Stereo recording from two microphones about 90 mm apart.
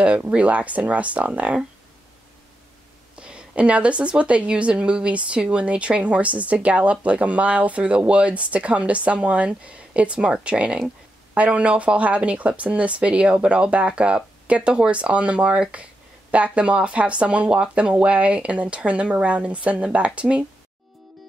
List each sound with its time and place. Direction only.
0.0 s speech: 15° right (ahead or behind)
3.2 s speech: 10° right (ahead or behind)